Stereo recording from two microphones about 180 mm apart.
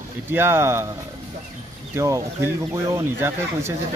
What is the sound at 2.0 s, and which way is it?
Speech, 15° right (ahead or behind).